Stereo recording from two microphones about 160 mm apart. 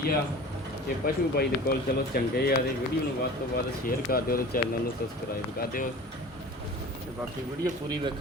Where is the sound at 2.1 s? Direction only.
75° left (ahead or behind).